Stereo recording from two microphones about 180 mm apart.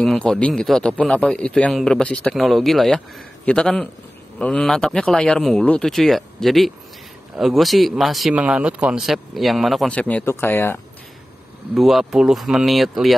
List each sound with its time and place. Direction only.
0.0 s speech: 5° left (ahead or behind)
11.7 s speech: centre (ahead or behind)